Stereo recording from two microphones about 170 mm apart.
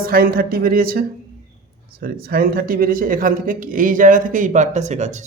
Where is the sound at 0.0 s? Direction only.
60° right (ahead or behind).